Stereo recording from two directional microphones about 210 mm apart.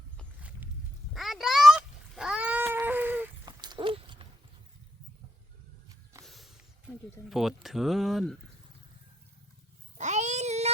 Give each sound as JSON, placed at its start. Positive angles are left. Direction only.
{"t": 1.1, "sound": "cat", "side_deg": 0}
{"t": 3.4, "sound": "dog", "side_deg": -20}
{"t": 6.2, "sound": "a sound", "side_deg": 0}
{"t": 7.3, "sound": "speech", "side_deg": 0}
{"t": 10.0, "sound": "babbling", "side_deg": -35}